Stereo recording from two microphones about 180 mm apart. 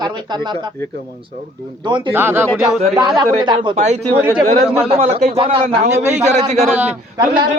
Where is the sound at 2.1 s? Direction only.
10° right (ahead or behind).